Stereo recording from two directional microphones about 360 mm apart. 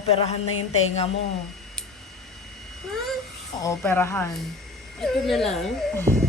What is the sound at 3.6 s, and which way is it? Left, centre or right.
Speech, centre.